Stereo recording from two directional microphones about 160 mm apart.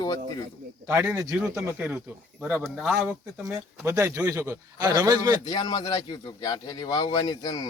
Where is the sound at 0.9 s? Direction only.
10° right (ahead or behind).